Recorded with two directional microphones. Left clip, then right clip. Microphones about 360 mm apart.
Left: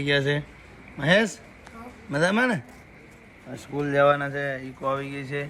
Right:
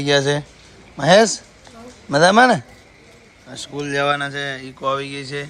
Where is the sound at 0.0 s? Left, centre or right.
Centre.